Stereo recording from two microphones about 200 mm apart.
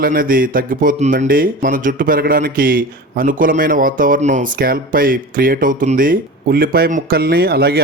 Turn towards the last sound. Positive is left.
turn(degrees=-50)  # may be behind; listen again after turning